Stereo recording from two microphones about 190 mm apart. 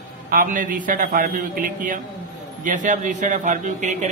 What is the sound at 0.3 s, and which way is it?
A man's voice, 45° right (ahead or behind).